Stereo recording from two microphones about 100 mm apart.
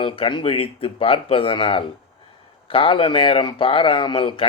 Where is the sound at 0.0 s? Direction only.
60° left (ahead or behind).